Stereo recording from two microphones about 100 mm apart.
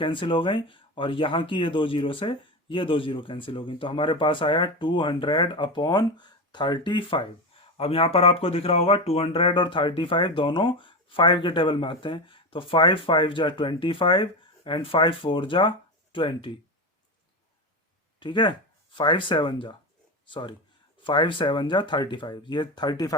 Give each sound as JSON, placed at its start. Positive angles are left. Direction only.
{"t": 0.0, "sound": "speech", "side_deg": 60}
{"t": 7.8, "sound": "speech", "side_deg": 70}
{"t": 18.2, "sound": "speech", "side_deg": 50}